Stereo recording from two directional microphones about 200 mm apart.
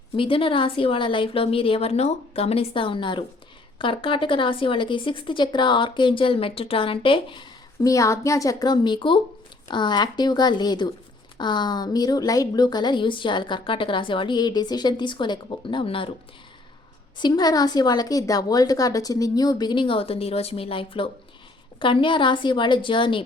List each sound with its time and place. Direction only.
0.2 s speech: 25° left (ahead or behind)
17.2 s speech: 20° left (ahead or behind)